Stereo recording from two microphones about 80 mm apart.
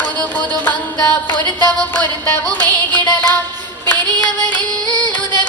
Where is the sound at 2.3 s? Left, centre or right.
Left.